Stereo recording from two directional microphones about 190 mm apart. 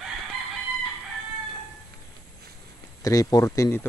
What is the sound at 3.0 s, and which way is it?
Speech, 20° left (ahead or behind).